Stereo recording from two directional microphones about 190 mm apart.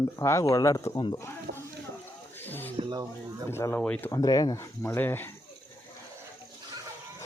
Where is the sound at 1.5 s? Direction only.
60° right (ahead or behind).